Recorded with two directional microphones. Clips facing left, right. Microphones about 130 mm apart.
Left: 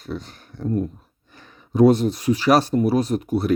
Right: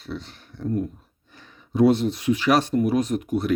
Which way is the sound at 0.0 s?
45° left (ahead or behind).